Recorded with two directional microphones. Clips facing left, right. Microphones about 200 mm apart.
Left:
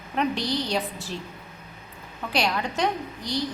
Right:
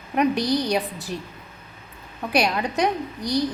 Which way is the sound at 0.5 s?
15° right (ahead or behind).